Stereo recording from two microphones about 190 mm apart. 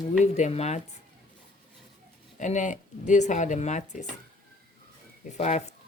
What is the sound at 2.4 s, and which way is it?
Speech, 40° left (ahead or behind).